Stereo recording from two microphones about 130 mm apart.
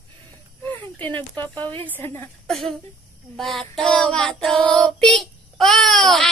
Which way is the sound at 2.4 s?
5° left (ahead or behind).